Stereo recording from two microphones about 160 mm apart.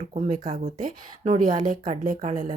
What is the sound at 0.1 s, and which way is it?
Speech, 50° right (ahead or behind).